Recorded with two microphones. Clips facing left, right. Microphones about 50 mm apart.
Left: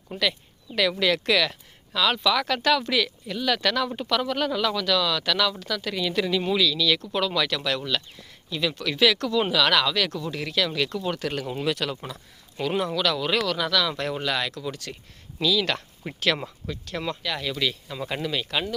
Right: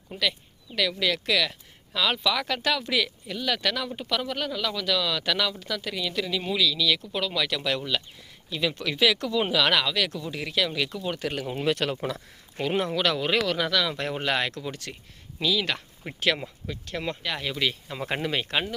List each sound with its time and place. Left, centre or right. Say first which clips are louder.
0.1 s speech: left 2 dB; centre
1.9 s speech: left 3 dB; centre
5.9 s speech: left 5 dB; centre
11.7 s speech: right 4 dB; right
12.5 s speech: even; right
15.4 s speech: left 2 dB; centre
18.0 s speech: even; right
18.5 s speech: left 1 dB; right